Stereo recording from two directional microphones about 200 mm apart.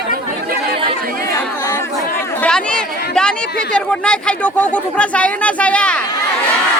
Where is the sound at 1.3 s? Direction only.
15° left (ahead or behind).